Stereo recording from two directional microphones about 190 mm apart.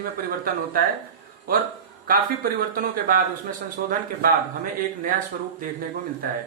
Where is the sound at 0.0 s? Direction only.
50° right (ahead or behind).